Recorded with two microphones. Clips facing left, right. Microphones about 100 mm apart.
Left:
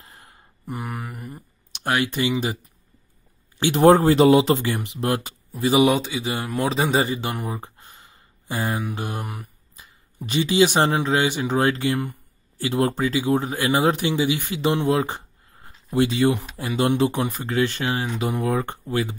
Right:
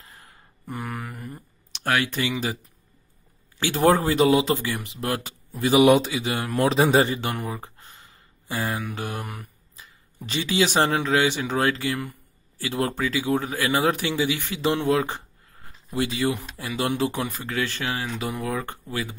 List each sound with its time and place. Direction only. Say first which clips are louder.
0.0 s a sound: left 1 dB; 30° left (ahead or behind)
3.5 s speech: left 5 dB; 20° left (ahead or behind)
4.0 s speech: left 4 dB; 35° left (ahead or behind)
5.9 s speech: right 3 dB; centre (ahead or behind)
7.2 s speech: left 1 dB; 15° left (ahead or behind)
11.8 s speech: left 4 dB; 30° left (ahead or behind)
14.5 s a sound: even; 15° left (ahead or behind)
16.0 s speech: left 5 dB; 25° left (ahead or behind)
18.1 s speech: left 5 dB; 35° left (ahead or behind)